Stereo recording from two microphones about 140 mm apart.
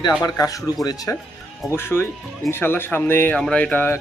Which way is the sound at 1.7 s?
15° left (ahead or behind).